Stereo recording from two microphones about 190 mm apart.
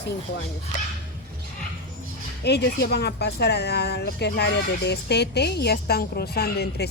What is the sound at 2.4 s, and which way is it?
Speech, 60° left (ahead or behind).